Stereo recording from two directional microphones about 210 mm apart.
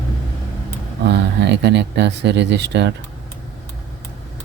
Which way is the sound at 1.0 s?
55° right (ahead or behind).